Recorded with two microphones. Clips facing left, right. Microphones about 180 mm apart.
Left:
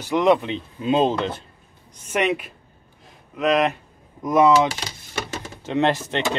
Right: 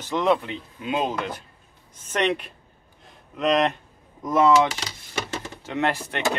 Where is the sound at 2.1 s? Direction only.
5° left (ahead or behind).